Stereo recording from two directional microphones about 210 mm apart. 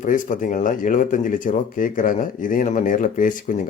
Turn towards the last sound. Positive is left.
turn(degrees=40)  # may be behind; listen again after turning